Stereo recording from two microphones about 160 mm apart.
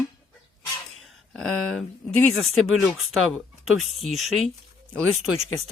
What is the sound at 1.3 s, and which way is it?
Speech, 5° left (ahead or behind).